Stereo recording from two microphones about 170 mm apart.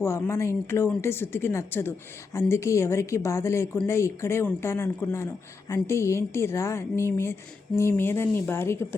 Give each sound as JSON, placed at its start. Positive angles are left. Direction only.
{"t": 0.0, "sound": "speech", "side_deg": 15}